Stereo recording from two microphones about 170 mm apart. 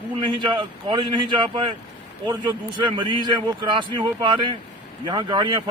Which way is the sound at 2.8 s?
30° right (ahead or behind).